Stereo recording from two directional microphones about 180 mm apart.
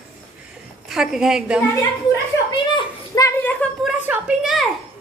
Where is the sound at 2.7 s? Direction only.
20° left (ahead or behind).